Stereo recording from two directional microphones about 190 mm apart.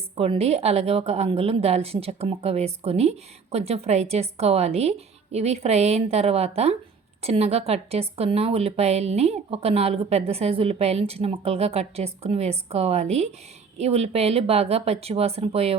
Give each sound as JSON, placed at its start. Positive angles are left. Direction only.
{"t": 0.2, "sound": "a woman's voice", "side_deg": -30}